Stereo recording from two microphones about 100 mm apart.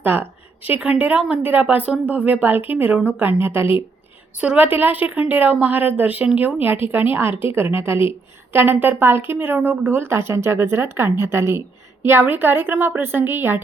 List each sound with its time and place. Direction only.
0.0 s a woman's voice: 20° right (ahead or behind)